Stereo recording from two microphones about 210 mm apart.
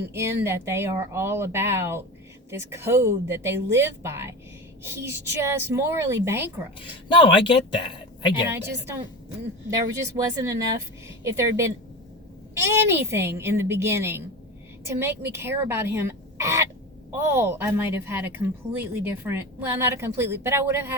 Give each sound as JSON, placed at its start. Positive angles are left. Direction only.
{"t": 0.1, "sound": "a woman's voice", "side_deg": -10}
{"t": 6.7, "sound": "speech", "side_deg": 25}
{"t": 8.4, "sound": "a woman's voice", "side_deg": -10}